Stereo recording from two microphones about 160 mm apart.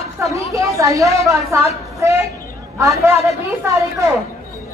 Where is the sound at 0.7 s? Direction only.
20° right (ahead or behind).